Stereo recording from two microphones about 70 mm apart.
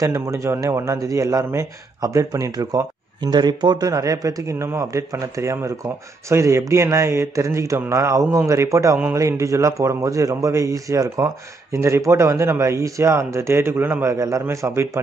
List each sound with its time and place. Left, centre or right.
0.0 s speech: right
2.0 s speech: right
3.9 s speech: right
14.1 s speech: right